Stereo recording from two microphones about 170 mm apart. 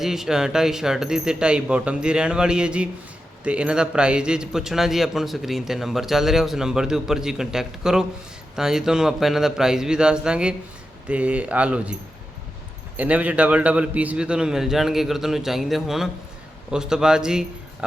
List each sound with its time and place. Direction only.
0.0 s a man's voice: centre (ahead or behind)
13.0 s a man's voice: 10° right (ahead or behind)